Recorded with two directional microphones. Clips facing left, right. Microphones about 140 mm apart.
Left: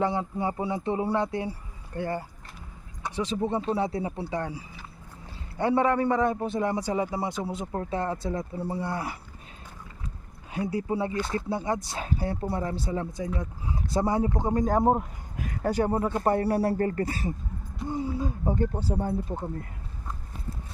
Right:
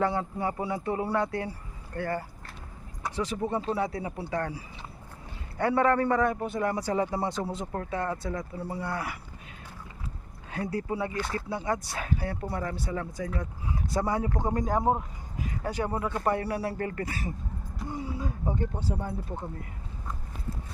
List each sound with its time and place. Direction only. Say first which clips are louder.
0.0 s a man's voice: left 1 dB; 20° left (ahead or behind)
7.9 s speech: left 2 dB; 30° left (ahead or behind)
10.5 s speech: left 3 dB; 15° left (ahead or behind)
14.6 s speech: left 6 dB; 35° left (ahead or behind)
15.4 s speech: left 5 dB; 50° left (ahead or behind); by 18.7 s 30° left (ahead or behind)
18.7 s a man's voice: left 5 dB; 5° left (ahead or behind)